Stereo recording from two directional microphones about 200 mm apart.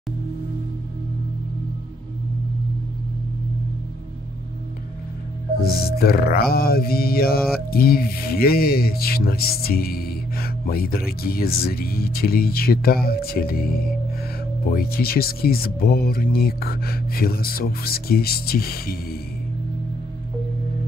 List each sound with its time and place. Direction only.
5.9 s speech: 50° left (ahead or behind)